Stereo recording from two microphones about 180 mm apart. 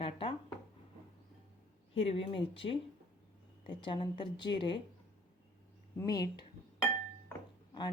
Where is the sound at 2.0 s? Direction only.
30° left (ahead or behind).